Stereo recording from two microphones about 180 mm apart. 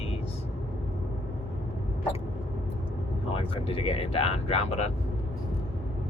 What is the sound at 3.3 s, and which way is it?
Speech, 30° left (ahead or behind).